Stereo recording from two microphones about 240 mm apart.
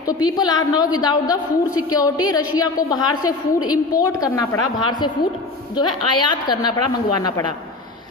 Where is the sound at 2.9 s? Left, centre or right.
Centre.